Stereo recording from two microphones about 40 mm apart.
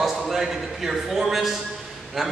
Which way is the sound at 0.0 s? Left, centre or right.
Centre.